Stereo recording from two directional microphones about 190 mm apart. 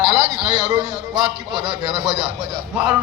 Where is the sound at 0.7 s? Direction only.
25° right (ahead or behind).